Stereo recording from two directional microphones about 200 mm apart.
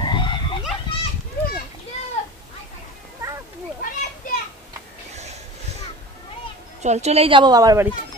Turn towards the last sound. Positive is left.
turn(degrees=-20)  # may be behind; listen again after turning